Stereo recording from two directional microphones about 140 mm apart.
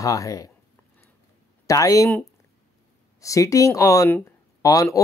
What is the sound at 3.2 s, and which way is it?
Speech, 20° left (ahead or behind).